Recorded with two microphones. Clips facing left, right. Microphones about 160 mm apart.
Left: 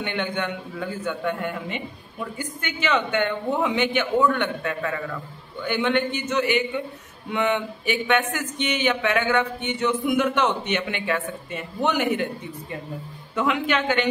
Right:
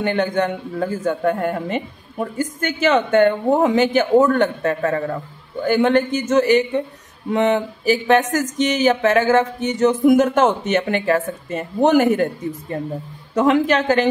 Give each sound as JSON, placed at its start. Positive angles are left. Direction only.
{"t": 0.0, "sound": "a man's voice", "side_deg": -40}